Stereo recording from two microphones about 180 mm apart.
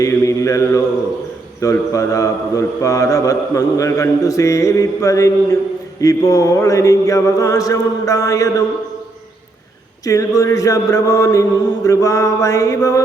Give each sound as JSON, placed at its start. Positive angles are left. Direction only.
{"t": 0.0, "sound": "mantra", "side_deg": 20}
{"t": 6.0, "sound": "chant", "side_deg": 20}
{"t": 10.1, "sound": "chant", "side_deg": 20}